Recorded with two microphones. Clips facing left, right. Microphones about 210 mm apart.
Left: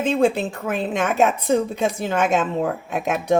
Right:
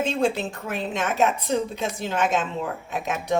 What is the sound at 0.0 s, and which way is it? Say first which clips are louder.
A woman's voice: left 5 dB; 55° left (ahead or behind).